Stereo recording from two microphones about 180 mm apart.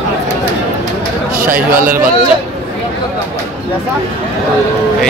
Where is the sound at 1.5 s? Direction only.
50° right (ahead or behind).